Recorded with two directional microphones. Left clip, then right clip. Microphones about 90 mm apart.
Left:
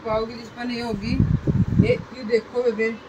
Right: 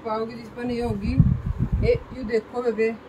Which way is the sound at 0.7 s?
20° right (ahead or behind).